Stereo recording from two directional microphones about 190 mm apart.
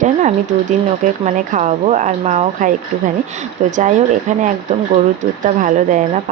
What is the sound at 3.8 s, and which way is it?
Speech, 40° right (ahead or behind).